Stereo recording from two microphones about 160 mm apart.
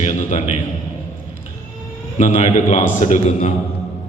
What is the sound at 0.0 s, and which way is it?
Speech, 45° left (ahead or behind).